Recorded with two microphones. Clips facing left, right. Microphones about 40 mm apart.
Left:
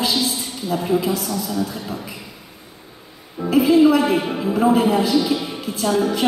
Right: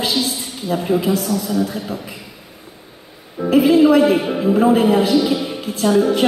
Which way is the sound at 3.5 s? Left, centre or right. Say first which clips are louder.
Right 2 dB; right.